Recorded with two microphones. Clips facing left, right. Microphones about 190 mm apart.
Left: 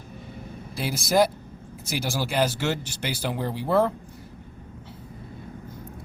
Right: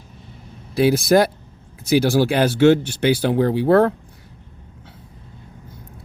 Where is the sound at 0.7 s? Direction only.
65° right (ahead or behind).